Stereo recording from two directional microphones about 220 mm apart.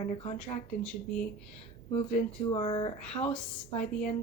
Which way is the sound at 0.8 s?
5° left (ahead or behind).